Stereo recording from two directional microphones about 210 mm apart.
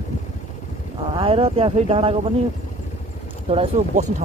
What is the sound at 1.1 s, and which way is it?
Speech, 25° right (ahead or behind).